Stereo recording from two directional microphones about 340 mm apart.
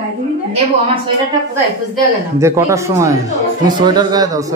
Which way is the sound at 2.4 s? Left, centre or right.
Centre.